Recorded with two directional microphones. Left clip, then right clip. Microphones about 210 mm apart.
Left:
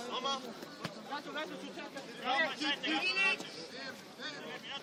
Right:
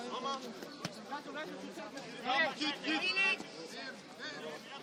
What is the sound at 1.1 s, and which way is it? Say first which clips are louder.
Chatter: left 4 dB; 20° left (ahead or behind).